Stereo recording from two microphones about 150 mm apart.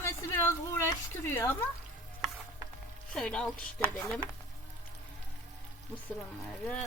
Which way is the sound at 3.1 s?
5° left (ahead or behind).